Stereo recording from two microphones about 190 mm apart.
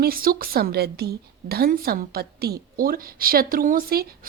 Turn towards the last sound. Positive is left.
turn(degrees=-50)  # may be behind; listen again after turning